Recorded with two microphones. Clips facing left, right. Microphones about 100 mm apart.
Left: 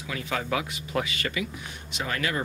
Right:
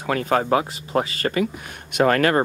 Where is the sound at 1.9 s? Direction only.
55° right (ahead or behind).